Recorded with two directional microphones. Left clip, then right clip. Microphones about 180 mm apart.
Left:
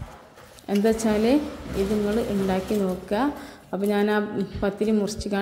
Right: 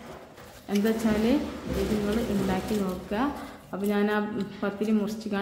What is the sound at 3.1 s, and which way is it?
A woman's voice, 25° left (ahead or behind).